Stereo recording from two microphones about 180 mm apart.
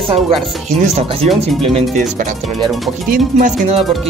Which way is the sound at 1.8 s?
45° right (ahead or behind).